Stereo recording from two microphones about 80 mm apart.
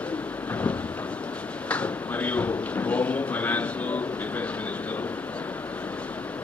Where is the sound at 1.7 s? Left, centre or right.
Centre.